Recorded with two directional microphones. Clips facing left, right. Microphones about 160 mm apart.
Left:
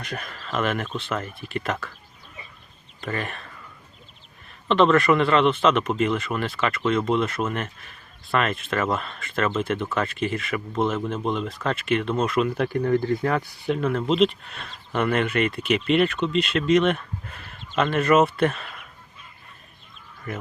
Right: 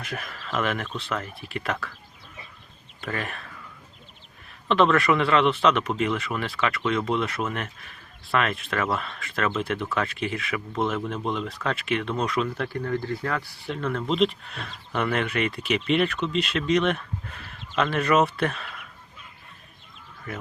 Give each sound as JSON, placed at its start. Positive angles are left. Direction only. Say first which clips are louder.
{"t": 0.0, "sound": "speech", "louder": "left 1 dB", "side_deg": 0}
{"t": 3.0, "sound": "speech", "louder": "left 2 dB", "side_deg": 0}
{"t": 4.7, "sound": "speech", "louder": "left 2 dB", "side_deg": 0}
{"t": 12.5, "sound": "speech", "louder": "left 6 dB", "side_deg": 20}
{"t": 13.8, "sound": "speech", "louder": "left 2 dB", "side_deg": 5}